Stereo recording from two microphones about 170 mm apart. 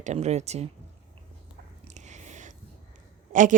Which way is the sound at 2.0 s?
45° right (ahead or behind).